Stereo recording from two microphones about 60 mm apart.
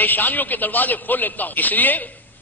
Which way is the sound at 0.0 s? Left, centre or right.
Left.